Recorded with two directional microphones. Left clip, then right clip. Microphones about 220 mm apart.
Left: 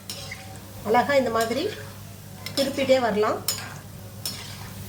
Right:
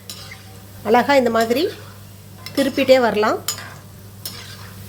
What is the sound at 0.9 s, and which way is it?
Speech, 45° right (ahead or behind).